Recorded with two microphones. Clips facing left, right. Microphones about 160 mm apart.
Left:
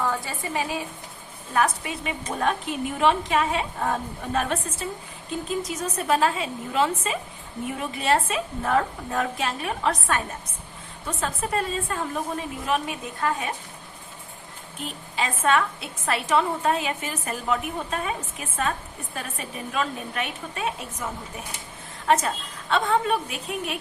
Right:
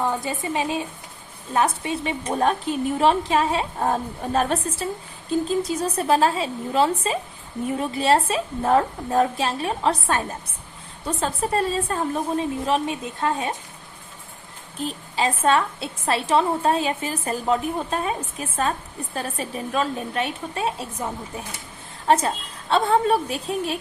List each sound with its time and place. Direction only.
0.0 s a woman's voice: 20° right (ahead or behind)
14.8 s a woman's voice: 35° right (ahead or behind)